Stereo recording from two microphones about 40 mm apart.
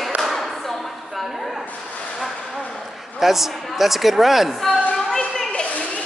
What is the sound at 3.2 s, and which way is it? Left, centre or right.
A man's voice, centre.